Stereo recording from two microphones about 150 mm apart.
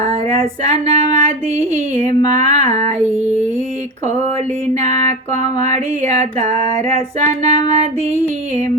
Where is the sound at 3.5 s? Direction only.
50° right (ahead or behind).